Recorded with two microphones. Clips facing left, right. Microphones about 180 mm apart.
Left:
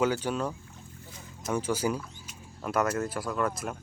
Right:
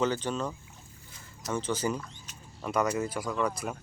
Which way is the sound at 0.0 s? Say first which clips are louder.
Left 2 dB; 10° left (ahead or behind).